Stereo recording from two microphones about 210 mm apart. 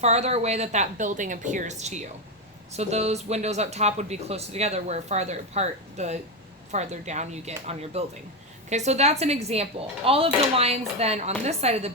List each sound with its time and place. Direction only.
0.0 s speech: 30° right (ahead or behind)